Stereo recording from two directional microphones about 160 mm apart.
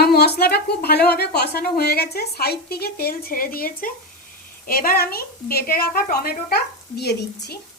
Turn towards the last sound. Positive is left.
turn(degrees=90)